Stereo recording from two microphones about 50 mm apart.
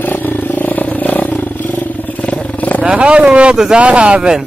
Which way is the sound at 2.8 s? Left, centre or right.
Right.